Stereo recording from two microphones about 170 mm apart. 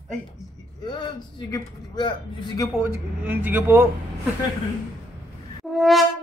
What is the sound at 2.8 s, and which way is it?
Speech, 10° right (ahead or behind).